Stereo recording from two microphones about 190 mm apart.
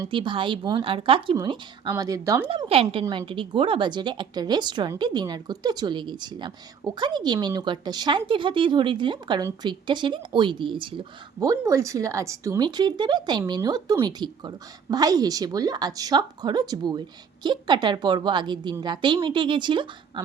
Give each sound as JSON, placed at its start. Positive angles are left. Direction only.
{"t": 0.0, "sound": "a woman's voice", "side_deg": -25}
{"t": 2.5, "sound": "speech", "side_deg": -30}